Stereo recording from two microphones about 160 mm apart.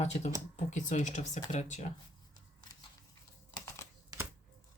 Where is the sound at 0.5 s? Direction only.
50° left (ahead or behind).